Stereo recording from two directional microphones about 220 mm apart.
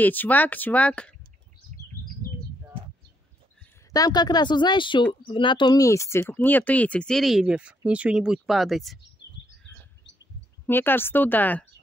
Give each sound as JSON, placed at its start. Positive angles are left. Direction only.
{"t": 0.0, "sound": "speech", "side_deg": 10}
{"t": 3.9, "sound": "speech", "side_deg": 15}
{"t": 10.7, "sound": "speech", "side_deg": 10}